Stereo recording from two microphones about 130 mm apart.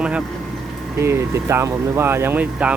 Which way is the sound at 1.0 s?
20° right (ahead or behind).